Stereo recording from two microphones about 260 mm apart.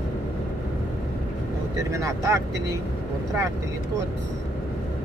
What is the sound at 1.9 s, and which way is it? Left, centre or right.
Speech, centre.